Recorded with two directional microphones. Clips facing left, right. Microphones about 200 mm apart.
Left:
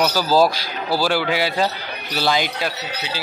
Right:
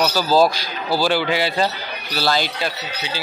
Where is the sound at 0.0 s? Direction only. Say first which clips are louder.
Even; 10° left (ahead or behind).